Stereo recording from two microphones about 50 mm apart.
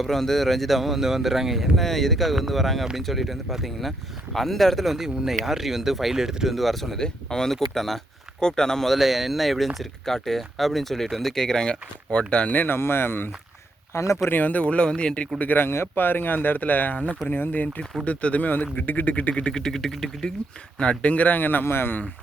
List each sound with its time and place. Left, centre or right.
0.0 s speech: centre
7.0 s speech: centre
12.6 s speech: left
13.9 s speech: left
14.3 s speech: left
15.4 s speech: left
15.6 s speech: left
16.0 s speech: left; by 20.1 s centre
20.7 s speech: centre; by 21.9 s left